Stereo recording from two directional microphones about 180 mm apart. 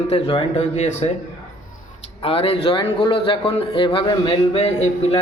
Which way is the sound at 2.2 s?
30° left (ahead or behind).